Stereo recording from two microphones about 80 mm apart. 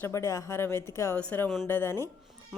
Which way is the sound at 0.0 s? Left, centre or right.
Left.